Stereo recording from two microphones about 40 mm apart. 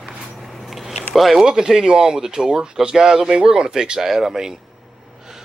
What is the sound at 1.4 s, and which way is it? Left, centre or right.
Speech, centre.